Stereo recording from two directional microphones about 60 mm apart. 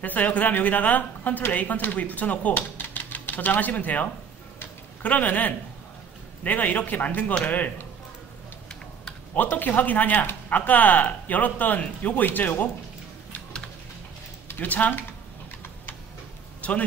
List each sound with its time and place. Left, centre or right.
0.0 s speech: left
9.3 s speech: left
14.5 s speech: left
16.6 s a man's voice: left